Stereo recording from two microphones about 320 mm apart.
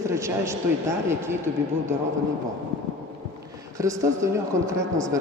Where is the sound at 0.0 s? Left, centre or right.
Centre.